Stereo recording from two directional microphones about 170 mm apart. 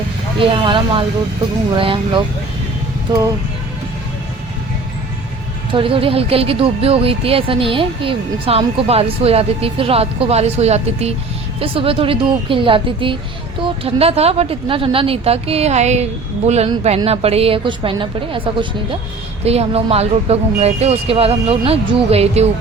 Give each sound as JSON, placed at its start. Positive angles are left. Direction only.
{"t": 0.3, "sound": "speech", "side_deg": -30}
{"t": 5.7, "sound": "speech", "side_deg": -30}